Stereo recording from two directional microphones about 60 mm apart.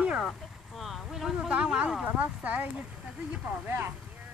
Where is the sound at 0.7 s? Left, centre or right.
Centre.